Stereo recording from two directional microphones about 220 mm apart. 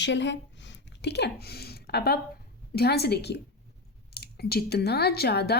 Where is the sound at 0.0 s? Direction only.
55° left (ahead or behind).